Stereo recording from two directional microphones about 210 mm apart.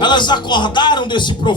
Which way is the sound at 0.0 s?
20° left (ahead or behind).